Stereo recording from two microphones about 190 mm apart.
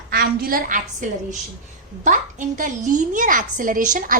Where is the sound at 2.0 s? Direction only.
40° right (ahead or behind).